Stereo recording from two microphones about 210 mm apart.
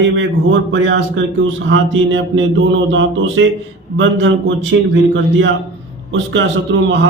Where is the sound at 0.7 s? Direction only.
55° right (ahead or behind).